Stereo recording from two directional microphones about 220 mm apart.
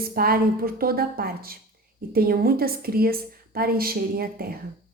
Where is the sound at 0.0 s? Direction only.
45° right (ahead or behind).